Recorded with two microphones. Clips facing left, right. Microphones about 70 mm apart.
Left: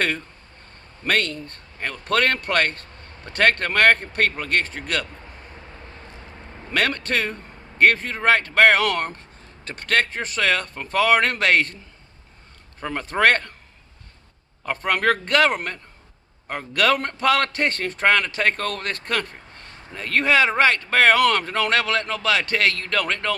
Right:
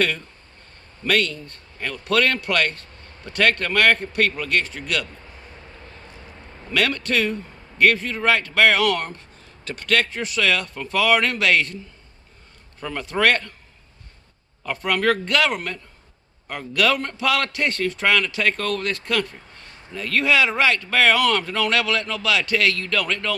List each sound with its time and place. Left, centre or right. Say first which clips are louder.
1.0 s speech: right 1 dB; left
6.7 s speech: even; left
12.8 s speech: left 1 dB; left
14.6 s speech: even; left